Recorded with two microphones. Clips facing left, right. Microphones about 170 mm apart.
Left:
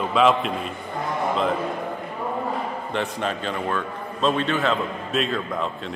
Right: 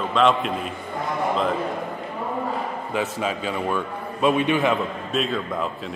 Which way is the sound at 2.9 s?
5° right (ahead or behind).